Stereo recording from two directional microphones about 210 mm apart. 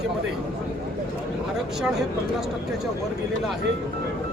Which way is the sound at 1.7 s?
Centre (ahead or behind).